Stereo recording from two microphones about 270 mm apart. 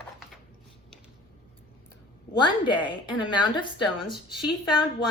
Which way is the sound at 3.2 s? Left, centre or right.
Centre.